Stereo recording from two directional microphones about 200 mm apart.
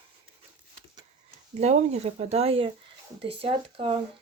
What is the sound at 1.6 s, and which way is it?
Speech, 35° right (ahead or behind).